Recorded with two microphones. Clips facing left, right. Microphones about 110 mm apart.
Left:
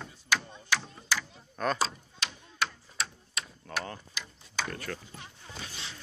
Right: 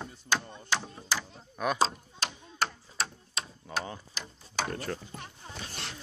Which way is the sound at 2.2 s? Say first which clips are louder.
Right 2 dB; 40° right (ahead or behind).